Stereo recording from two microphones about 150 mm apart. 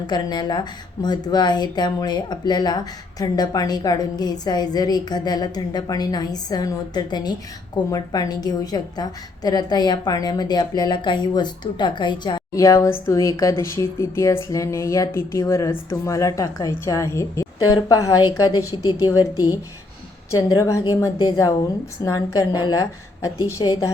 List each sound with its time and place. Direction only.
0.1 s a woman's voice: 30° left (ahead or behind)